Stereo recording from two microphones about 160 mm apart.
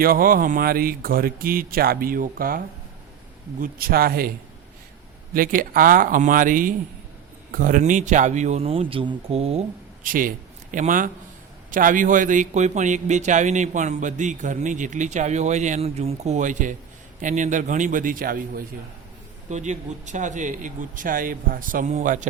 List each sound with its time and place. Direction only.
0.0 s speech: 65° right (ahead or behind)
3.6 s speech: 70° right (ahead or behind)
5.3 s speech: 60° right (ahead or behind); by 9.6 s 40° right (ahead or behind)
10.0 s a man's voice: 60° right (ahead or behind)
19.5 s speech: 50° right (ahead or behind)